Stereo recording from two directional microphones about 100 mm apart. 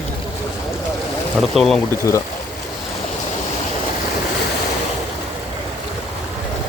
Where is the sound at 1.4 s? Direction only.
Centre (ahead or behind).